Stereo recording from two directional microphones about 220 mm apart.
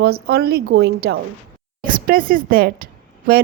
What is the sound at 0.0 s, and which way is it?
A woman's voice, 45° right (ahead or behind).